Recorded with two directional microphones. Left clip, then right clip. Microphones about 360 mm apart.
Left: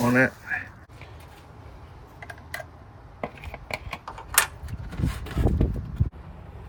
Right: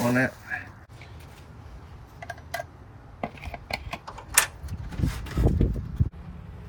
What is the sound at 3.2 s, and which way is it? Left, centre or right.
Typing, centre.